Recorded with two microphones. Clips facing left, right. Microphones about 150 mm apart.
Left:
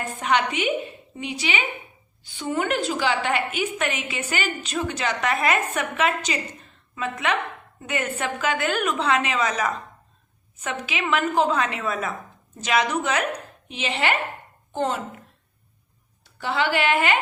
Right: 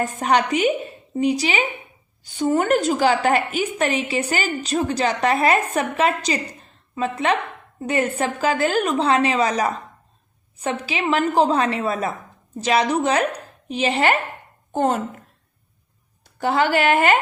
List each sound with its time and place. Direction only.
0.2 s a woman's voice: 40° right (ahead or behind)
16.2 s a woman's voice: 45° right (ahead or behind)